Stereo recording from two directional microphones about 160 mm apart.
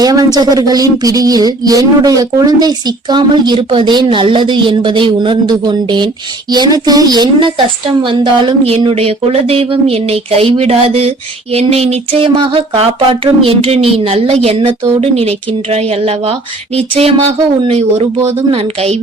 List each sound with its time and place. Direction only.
0.0 s a woman's voice: 25° right (ahead or behind); by 18.9 s 40° right (ahead or behind)